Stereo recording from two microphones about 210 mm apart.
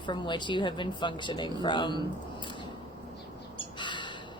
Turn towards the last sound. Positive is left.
turn(degrees=20)  # may be behind; listen again after turning